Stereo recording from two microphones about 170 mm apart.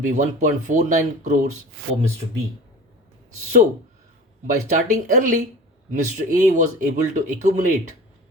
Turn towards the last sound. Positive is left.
turn(degrees=-45)  # may be behind; listen again after turning